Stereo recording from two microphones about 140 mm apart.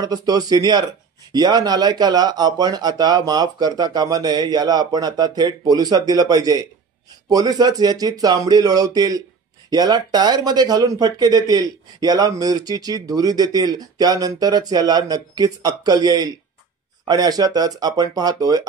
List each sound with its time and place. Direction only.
0.0 s speech: 25° right (ahead or behind)